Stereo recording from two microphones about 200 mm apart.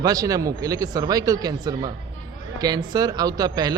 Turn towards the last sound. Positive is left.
turn(degrees=-20)  # may be behind; listen again after turning